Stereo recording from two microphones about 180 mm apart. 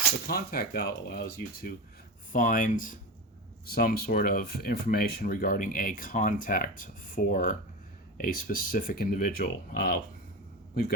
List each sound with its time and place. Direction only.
0.3 s speech: 55° left (ahead or behind)